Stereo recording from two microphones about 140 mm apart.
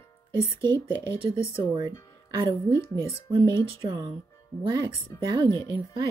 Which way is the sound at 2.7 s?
20° left (ahead or behind).